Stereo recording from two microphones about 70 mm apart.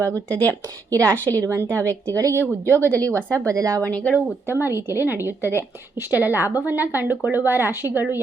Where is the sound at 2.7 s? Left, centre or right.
Left.